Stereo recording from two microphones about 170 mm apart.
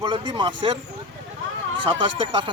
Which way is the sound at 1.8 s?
30° right (ahead or behind).